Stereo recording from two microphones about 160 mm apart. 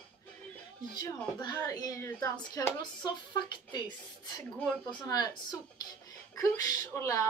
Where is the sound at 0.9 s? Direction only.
25° left (ahead or behind).